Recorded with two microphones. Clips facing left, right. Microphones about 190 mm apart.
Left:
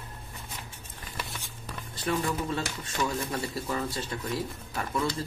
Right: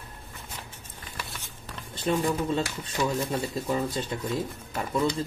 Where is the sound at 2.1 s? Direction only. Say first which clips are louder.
Right 4 dB; 25° right (ahead or behind).